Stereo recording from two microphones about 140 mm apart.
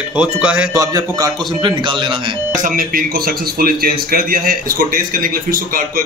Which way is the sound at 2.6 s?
85° right.